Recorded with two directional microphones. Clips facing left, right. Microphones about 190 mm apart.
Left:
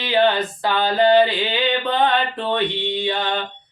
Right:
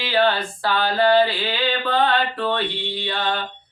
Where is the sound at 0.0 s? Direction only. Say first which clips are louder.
Left 2 dB; 20° left (ahead or behind).